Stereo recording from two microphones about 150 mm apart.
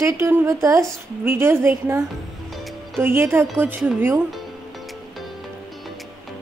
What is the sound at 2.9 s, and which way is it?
Speech, 15° right (ahead or behind).